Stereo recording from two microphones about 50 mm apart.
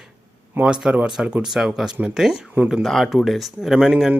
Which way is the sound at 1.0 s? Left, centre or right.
Centre.